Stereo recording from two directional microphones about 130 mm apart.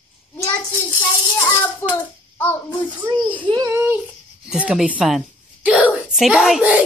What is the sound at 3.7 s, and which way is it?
Speech, 20° right (ahead or behind).